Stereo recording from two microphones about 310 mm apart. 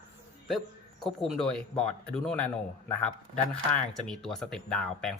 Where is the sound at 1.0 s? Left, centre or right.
Centre.